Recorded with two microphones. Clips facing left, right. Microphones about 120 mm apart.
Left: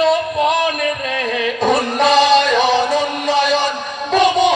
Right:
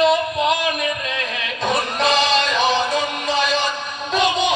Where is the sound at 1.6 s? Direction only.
50° left (ahead or behind).